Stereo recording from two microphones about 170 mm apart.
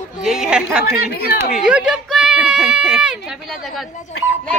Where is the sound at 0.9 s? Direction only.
65° left (ahead or behind).